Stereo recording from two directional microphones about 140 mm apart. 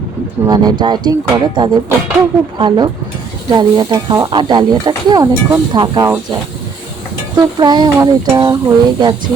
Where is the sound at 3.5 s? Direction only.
35° right (ahead or behind).